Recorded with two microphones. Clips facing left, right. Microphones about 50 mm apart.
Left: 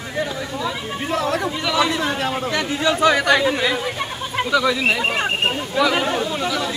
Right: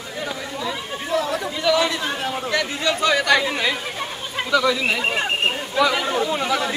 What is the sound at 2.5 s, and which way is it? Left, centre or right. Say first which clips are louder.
Speech: left 2 dB; left.